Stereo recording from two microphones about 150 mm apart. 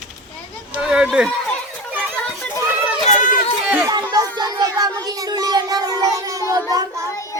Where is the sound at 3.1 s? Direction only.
55° left (ahead or behind).